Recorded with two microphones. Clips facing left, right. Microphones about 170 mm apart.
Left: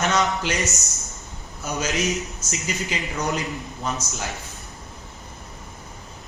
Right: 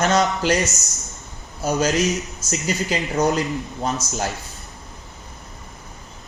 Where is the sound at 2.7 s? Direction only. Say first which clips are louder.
Right 5 dB; 35° right (ahead or behind).